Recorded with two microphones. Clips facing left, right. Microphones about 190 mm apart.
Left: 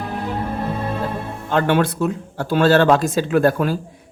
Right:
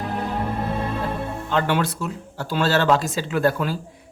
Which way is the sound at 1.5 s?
50° left (ahead or behind).